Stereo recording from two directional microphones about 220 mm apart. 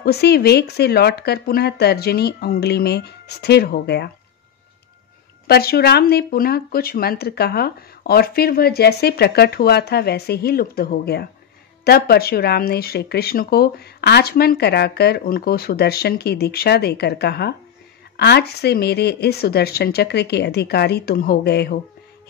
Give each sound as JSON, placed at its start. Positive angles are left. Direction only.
{"t": 0.0, "sound": "speech", "side_deg": 45}
{"t": 5.5, "sound": "speech", "side_deg": 45}